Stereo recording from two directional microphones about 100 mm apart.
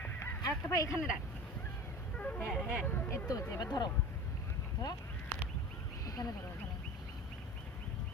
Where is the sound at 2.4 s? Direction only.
Centre (ahead or behind).